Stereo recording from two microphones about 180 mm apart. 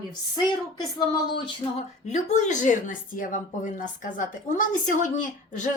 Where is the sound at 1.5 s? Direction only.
35° left (ahead or behind).